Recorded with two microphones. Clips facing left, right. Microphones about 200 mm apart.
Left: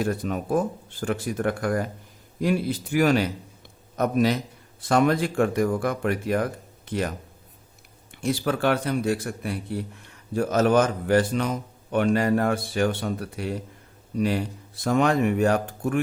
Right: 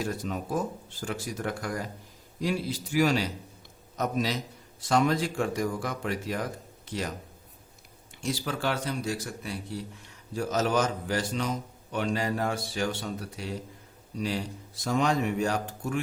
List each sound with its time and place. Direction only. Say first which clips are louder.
0.0 s a man's voice: left 6 dB; 55° left (ahead or behind)
8.1 s a man's voice: left 7 dB; 55° left (ahead or behind)